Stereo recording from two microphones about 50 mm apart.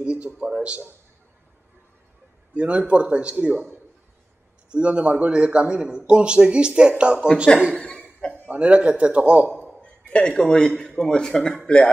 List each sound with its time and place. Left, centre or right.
0.0 s a man's voice: right
2.5 s a man's voice: right
7.7 s speech: centre
8.5 s a man's voice: right
9.6 s a sound: left
11.1 s speech: centre